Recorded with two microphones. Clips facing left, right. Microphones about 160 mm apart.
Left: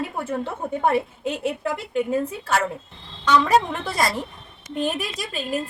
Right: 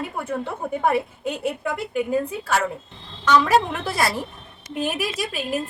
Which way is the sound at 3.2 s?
5° right (ahead or behind).